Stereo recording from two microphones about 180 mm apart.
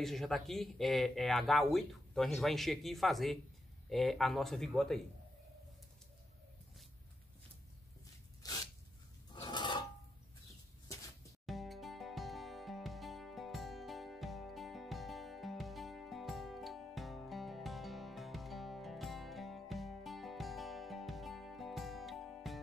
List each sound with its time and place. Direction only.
0.0 s speech: centre (ahead or behind)
8.4 s sneeze: 20° left (ahead or behind)
9.3 s filing: 25° left (ahead or behind)
11.4 s music: centre (ahead or behind)